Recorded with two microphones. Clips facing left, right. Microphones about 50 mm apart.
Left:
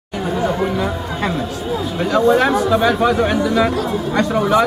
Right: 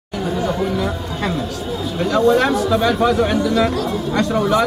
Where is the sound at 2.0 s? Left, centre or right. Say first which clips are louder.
Even; centre.